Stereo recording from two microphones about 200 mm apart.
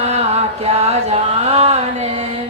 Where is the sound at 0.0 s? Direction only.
30° right (ahead or behind).